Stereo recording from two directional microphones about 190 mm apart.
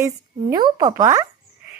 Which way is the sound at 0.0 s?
20° right (ahead or behind).